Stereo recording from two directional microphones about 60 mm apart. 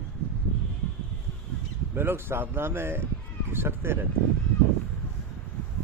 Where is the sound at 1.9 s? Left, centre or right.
Right.